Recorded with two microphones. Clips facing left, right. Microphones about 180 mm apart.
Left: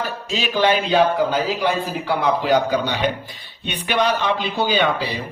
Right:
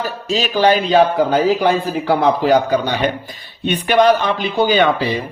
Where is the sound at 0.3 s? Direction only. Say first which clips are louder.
Right 4 dB; 40° right (ahead or behind).